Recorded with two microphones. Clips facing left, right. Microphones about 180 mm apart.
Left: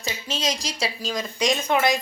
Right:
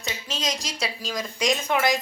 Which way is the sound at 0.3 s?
Centre (ahead or behind).